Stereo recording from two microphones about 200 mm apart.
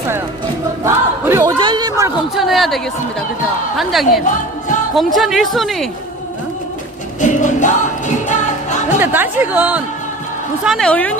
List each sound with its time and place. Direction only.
0.9 s battle cry: 15° right (ahead or behind)
2.3 s a sound: centre (ahead or behind)
3.8 s speech: centre (ahead or behind)
7.2 s music: 40° left (ahead or behind)
9.0 s a woman's voice: 10° right (ahead or behind); by 11.1 s 5° left (ahead or behind)